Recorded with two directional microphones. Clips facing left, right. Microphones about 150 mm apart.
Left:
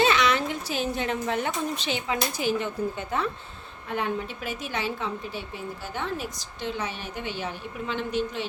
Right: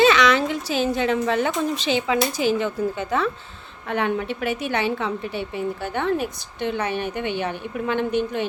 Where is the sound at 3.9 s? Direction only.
70° right (ahead or behind); by 8.4 s 55° right (ahead or behind).